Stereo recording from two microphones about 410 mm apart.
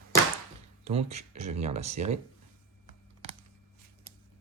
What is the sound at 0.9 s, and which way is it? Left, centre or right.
Speech, centre.